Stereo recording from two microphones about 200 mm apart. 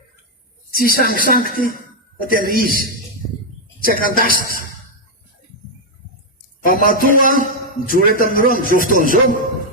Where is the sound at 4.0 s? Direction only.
45° left (ahead or behind).